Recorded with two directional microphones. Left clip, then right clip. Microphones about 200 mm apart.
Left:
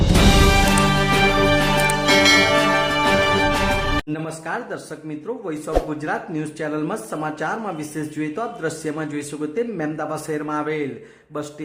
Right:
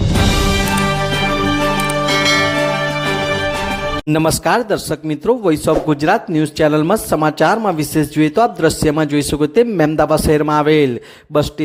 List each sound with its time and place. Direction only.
0.0 s music: centre (ahead or behind)
4.1 s speech: 45° right (ahead or behind)